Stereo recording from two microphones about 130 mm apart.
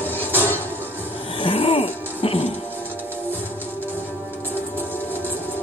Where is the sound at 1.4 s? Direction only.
45° left (ahead or behind).